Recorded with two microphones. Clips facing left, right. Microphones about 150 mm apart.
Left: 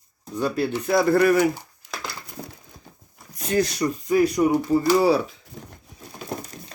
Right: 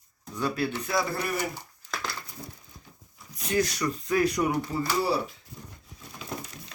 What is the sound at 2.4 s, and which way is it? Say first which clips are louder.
Crushing: left 5 dB; 70° left (ahead or behind).